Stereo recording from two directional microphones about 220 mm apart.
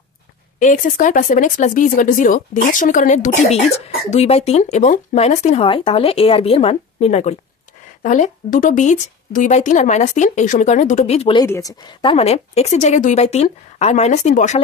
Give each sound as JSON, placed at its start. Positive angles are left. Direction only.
{"t": 0.6, "sound": "speech", "side_deg": 35}
{"t": 11.4, "sound": "speech", "side_deg": 15}